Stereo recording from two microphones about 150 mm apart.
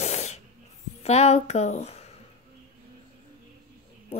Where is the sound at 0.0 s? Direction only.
50° left (ahead or behind).